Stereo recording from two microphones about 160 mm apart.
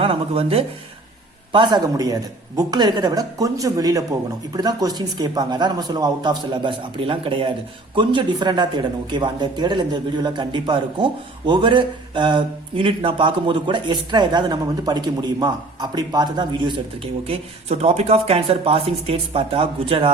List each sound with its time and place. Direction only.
0.0 s a man's voice: 35° right (ahead or behind)